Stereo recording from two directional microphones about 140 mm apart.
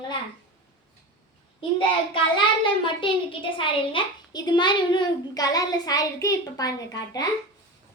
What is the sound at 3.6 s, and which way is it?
A child's voice, 40° left (ahead or behind).